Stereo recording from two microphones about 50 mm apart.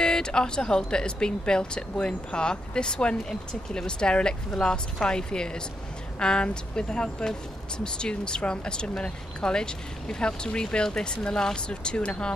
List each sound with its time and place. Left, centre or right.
0.0 s speech: centre